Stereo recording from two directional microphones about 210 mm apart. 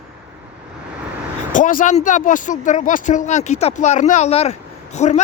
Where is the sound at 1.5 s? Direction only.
40° left (ahead or behind).